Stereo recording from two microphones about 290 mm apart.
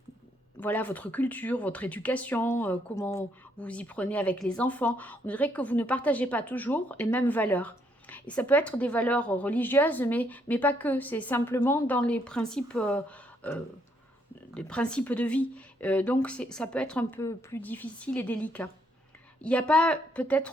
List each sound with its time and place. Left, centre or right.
0.6 s speech: centre
14.5 s speech: centre